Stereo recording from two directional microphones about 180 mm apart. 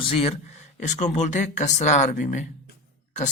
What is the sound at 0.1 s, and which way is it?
Speech, 30° left (ahead or behind).